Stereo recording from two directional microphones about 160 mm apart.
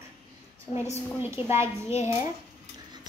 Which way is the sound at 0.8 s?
15° right (ahead or behind).